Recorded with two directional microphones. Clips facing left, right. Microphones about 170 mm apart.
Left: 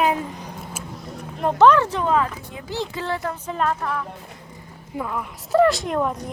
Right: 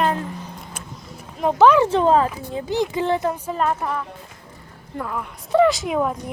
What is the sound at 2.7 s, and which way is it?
Speech, 20° right (ahead or behind).